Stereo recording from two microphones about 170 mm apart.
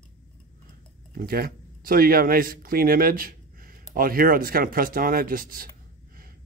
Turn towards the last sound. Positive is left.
turn(degrees=-55)  # may be behind; listen again after turning